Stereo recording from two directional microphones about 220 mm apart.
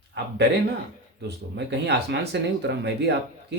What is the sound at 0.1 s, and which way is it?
Speech, 50° right (ahead or behind).